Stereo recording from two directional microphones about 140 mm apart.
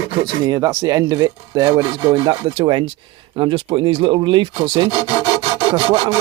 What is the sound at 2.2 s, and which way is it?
Speech, 35° right (ahead or behind).